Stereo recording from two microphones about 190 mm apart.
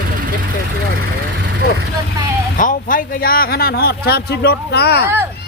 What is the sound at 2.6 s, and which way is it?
A man's voice, 45° left (ahead or behind).